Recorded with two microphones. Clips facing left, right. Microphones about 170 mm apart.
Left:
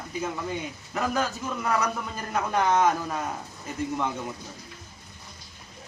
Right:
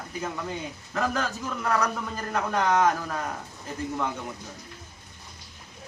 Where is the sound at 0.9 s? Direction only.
15° left (ahead or behind).